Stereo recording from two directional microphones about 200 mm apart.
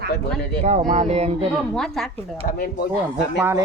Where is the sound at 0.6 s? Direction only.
35° right (ahead or behind).